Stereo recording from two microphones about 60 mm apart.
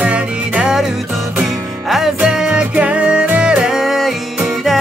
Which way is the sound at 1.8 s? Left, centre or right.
Centre.